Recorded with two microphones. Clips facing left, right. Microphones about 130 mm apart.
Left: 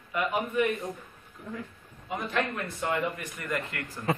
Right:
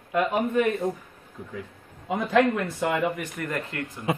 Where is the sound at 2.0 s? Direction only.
90° right.